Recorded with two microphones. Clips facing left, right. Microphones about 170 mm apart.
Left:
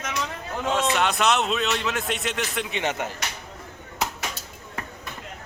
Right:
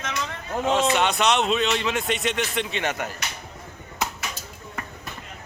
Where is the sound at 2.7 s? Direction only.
15° left (ahead or behind).